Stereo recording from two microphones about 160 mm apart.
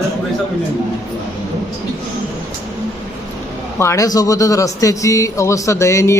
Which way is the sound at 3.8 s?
20° left (ahead or behind).